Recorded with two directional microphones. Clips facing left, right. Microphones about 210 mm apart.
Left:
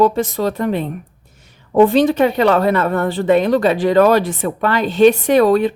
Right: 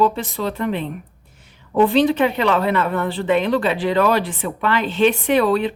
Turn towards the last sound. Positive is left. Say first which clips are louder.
# left 5 dB
turn(degrees=45)  # may be behind; listen again after turning